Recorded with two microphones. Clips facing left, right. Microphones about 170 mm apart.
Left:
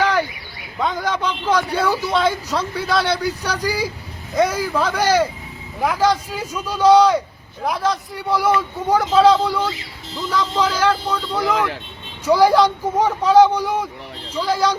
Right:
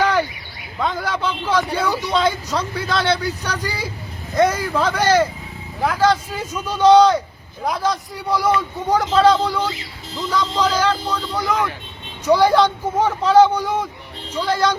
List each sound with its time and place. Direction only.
0.8 s speech: 5° right (ahead or behind)
1.9 s speech: 5° left (ahead or behind)